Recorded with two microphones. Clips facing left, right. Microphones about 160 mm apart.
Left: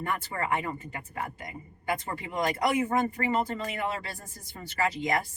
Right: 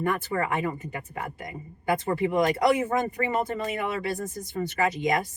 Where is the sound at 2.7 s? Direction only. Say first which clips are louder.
Right 1 dB; 20° right (ahead or behind).